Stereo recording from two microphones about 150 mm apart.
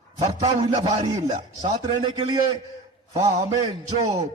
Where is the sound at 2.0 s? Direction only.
30° right (ahead or behind).